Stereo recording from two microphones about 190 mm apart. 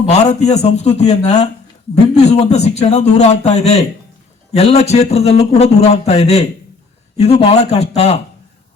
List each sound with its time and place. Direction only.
0.1 s a man's voice: 35° left (ahead or behind)